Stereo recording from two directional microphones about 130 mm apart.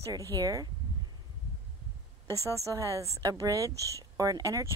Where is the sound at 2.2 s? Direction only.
25° right (ahead or behind).